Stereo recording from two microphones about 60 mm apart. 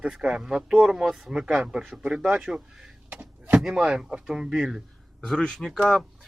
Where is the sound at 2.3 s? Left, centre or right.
Centre.